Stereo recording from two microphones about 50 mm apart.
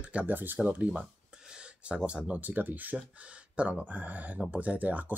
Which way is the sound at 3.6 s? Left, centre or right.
Right.